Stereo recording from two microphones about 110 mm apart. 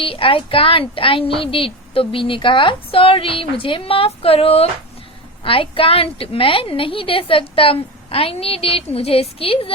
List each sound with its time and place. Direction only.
0.0 s speech: 55° left (ahead or behind)